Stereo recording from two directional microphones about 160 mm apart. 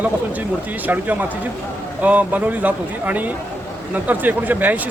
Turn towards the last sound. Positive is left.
turn(degrees=-10)  # may be behind; listen again after turning